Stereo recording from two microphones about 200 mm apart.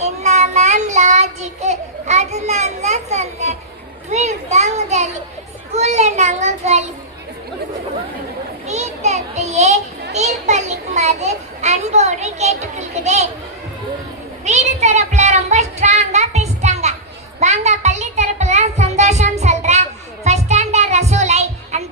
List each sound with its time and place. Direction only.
0.0 s child singing: 35° right (ahead or behind)
4.1 s a child's voice: 35° right (ahead or behind)
8.6 s children playing: 35° right (ahead or behind)
10.1 s a child's voice: 35° right (ahead or behind)
14.4 s child singing: 35° right (ahead or behind)
17.4 s music: 35° right (ahead or behind)